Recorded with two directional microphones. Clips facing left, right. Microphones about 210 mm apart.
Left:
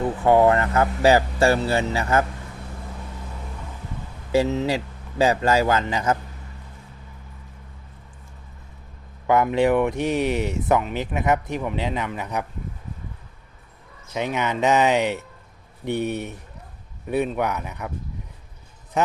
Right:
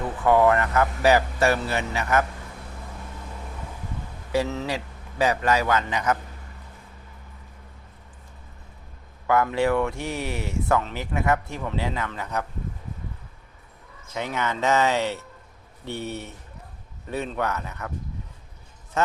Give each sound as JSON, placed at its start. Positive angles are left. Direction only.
{"t": 0.3, "sound": "speech", "side_deg": 30}
{"t": 4.3, "sound": "speech", "side_deg": 25}
{"t": 9.2, "sound": "speech", "side_deg": 20}
{"t": 14.1, "sound": "speech", "side_deg": 15}
{"t": 19.0, "sound": "speech", "side_deg": 15}